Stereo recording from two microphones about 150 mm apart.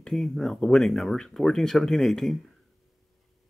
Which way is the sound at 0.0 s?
Centre (ahead or behind).